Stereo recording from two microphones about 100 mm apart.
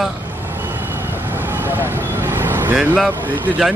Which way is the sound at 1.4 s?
20° right (ahead or behind).